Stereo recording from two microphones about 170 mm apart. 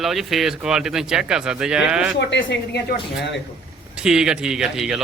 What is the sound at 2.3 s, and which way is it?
Speech, 90° left.